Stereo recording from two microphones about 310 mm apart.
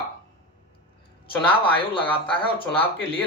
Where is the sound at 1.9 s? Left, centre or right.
Centre.